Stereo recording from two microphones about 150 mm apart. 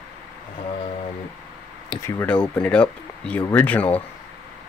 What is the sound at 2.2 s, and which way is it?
Speech, 5° left (ahead or behind).